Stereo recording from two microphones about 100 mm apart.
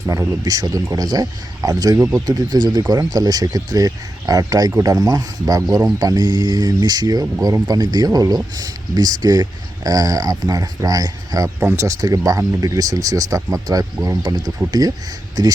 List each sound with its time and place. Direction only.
0.0 s speech: 35° right (ahead or behind)